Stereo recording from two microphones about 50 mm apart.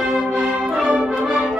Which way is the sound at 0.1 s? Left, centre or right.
Centre.